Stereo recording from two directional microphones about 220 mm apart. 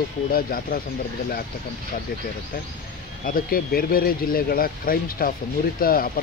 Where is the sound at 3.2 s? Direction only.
40° left (ahead or behind).